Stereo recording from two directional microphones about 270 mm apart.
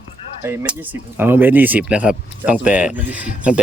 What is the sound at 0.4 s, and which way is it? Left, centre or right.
A man's voice, centre.